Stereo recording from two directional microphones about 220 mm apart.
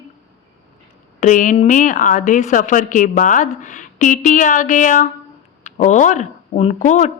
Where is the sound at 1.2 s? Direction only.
35° left (ahead or behind).